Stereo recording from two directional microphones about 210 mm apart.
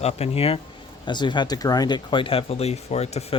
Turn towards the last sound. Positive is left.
turn(degrees=30)  # may be behind; listen again after turning